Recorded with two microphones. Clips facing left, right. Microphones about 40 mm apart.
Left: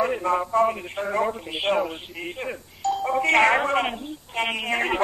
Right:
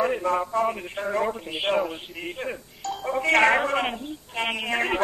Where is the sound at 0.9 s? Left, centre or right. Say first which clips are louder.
Left 1 dB; centre.